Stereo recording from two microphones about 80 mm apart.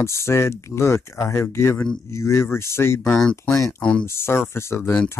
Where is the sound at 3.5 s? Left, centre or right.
Left.